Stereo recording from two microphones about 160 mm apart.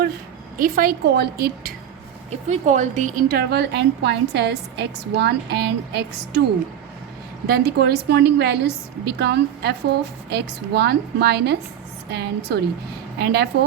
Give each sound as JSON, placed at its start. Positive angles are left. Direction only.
{"t": 0.5, "sound": "a woman's voice", "side_deg": -65}
{"t": 2.3, "sound": "a woman's voice", "side_deg": -45}
{"t": 7.4, "sound": "a woman's voice", "side_deg": -75}